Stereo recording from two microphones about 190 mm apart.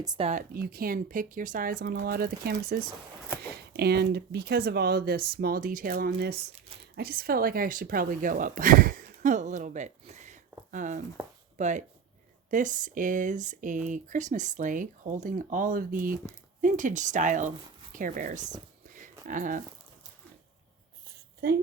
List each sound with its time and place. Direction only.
0.0 s speech: 20° right (ahead or behind)
0.3 s speech: 45° right (ahead or behind)
6.1 s speech: 60° right (ahead or behind); by 19.6 s 45° right (ahead or behind)
21.4 s speech: 50° right (ahead or behind)